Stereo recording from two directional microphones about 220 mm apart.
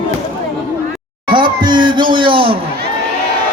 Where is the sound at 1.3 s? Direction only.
20° right (ahead or behind).